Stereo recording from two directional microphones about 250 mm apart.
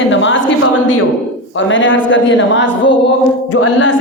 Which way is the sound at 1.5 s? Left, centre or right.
Left.